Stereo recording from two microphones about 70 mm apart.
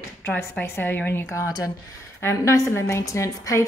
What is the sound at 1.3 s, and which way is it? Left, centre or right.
Speech, left.